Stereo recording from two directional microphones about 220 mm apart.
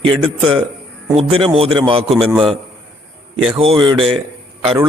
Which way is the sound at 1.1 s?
25° right (ahead or behind).